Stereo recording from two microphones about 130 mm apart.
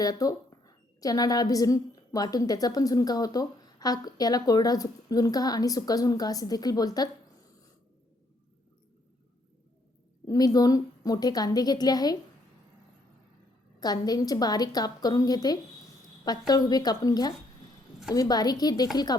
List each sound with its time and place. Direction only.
0.0 s a woman's voice: 30° left (ahead or behind)
10.2 s a woman's voice: 30° left (ahead or behind)
13.7 s a woman's voice: 30° left (ahead or behind)